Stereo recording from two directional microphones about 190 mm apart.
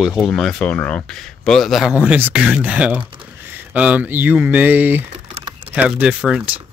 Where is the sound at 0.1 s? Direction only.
5° left (ahead or behind).